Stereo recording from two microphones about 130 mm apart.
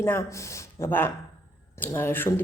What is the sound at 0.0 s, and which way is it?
A woman's voice, 20° left (ahead or behind).